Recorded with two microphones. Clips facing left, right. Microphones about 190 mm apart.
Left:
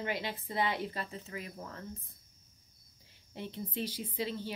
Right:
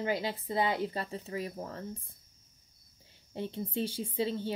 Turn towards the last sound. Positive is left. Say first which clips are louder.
# right 5 dB
turn(degrees=-30)  # may be behind; listen again after turning